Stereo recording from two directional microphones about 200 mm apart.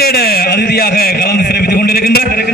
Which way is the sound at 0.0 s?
50° left (ahead or behind).